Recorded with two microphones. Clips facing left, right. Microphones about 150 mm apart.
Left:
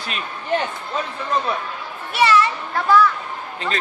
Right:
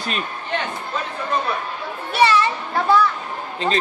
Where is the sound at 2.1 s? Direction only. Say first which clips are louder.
Even; 25° right (ahead or behind).